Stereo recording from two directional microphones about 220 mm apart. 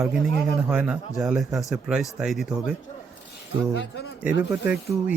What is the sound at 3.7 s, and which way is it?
Speech, 55° left (ahead or behind).